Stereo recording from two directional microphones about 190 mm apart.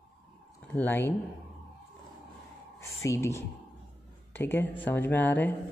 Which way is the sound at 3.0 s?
15° left (ahead or behind).